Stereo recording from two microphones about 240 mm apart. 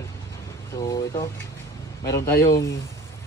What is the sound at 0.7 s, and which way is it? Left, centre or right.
Speech, centre.